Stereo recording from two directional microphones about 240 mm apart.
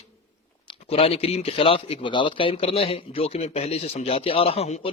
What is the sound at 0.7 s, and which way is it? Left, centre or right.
Speech, left.